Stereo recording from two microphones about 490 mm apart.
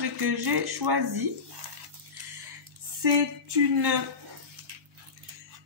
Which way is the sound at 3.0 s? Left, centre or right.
Right.